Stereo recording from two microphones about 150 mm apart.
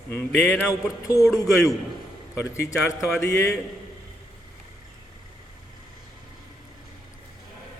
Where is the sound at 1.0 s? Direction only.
20° left (ahead or behind).